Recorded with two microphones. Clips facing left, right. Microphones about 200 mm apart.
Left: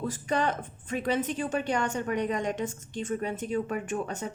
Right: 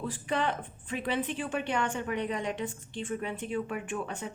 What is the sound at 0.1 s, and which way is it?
A woman's voice, 40° left (ahead or behind).